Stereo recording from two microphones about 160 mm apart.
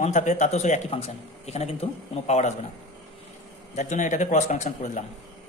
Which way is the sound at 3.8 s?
50° left (ahead or behind).